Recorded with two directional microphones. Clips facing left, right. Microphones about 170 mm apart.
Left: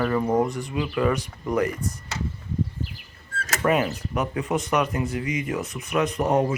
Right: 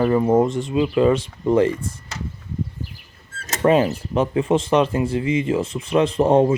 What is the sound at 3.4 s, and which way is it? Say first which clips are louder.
Speech: right 6 dB; 25° right (ahead or behind).